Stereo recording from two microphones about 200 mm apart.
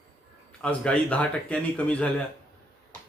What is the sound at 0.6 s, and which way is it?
Speech, 5° left (ahead or behind).